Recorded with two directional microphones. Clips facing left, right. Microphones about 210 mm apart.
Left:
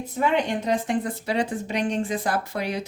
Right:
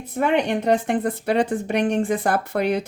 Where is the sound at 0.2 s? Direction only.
60° right (ahead or behind).